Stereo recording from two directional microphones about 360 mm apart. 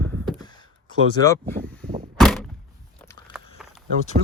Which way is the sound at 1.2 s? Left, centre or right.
Centre.